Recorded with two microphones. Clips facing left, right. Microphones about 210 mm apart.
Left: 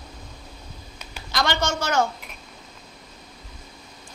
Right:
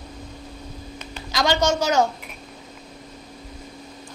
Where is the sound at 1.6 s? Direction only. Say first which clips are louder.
Right 5 dB; 40° right (ahead or behind).